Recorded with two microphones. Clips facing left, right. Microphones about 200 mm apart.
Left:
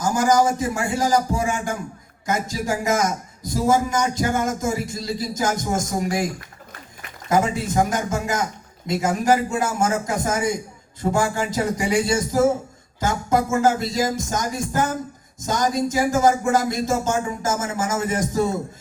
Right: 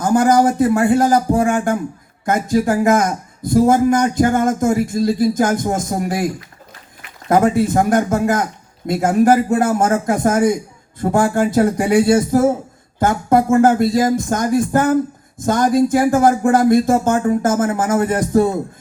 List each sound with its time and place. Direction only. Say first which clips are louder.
0.0 s a man's voice: right 5 dB; 55° right (ahead or behind)
7.3 s a man's voice: right 7 dB; 55° right (ahead or behind)